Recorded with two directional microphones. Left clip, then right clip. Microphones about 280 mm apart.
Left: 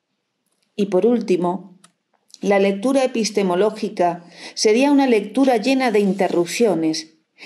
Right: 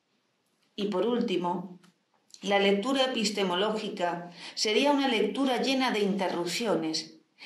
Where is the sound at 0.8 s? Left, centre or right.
Left.